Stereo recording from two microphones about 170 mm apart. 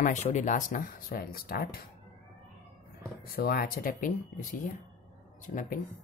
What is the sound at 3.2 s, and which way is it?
Speech, 60° left (ahead or behind).